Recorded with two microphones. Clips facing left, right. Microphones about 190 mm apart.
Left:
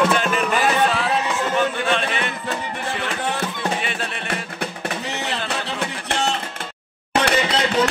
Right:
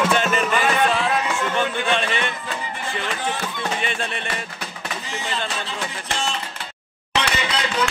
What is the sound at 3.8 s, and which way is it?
Music, 5° left (ahead or behind).